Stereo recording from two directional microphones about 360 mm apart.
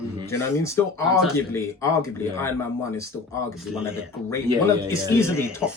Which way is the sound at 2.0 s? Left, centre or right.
Centre.